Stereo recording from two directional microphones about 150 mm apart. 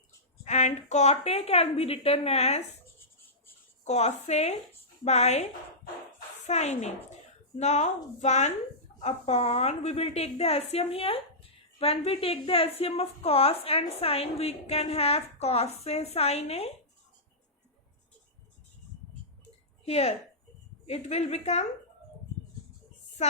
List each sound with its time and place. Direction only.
0.4 s a woman's voice: 50° left (ahead or behind)
3.8 s a woman's voice: 45° left (ahead or behind)
19.8 s a woman's voice: 45° left (ahead or behind)